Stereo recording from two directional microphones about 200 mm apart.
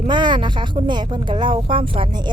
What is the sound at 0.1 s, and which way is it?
Speech, 20° right (ahead or behind).